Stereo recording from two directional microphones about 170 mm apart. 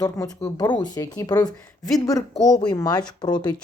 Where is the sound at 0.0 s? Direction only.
20° left (ahead or behind).